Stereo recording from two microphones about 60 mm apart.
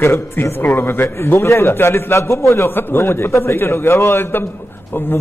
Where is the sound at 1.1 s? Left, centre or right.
Left.